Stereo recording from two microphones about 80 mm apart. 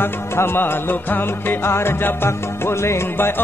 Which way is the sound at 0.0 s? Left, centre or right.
Left.